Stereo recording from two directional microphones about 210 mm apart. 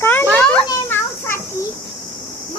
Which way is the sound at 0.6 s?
10° left (ahead or behind).